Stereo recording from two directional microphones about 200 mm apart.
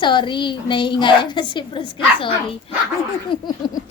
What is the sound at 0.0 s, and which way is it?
Speech, 25° left (ahead or behind).